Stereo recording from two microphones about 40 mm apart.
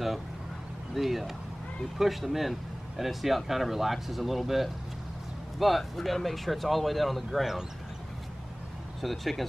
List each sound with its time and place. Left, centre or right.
0.9 s speech: centre
9.0 s speech: centre